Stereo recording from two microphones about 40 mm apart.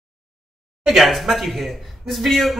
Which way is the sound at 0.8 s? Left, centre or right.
Centre.